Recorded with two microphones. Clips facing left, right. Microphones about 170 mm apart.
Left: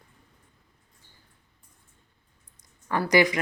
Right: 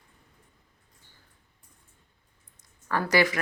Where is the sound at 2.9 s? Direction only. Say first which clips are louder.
Left 3 dB; 15° left (ahead or behind).